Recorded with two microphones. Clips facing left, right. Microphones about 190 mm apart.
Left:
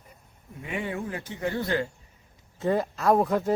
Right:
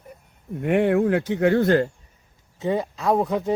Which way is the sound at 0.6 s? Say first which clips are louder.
Right 13 dB; 65° right (ahead or behind).